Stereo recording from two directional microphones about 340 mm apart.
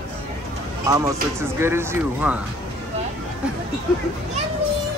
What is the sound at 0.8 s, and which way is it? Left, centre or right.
Speech, centre.